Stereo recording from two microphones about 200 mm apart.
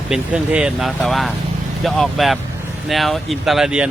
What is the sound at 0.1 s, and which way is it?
Speech, 5° right (ahead or behind).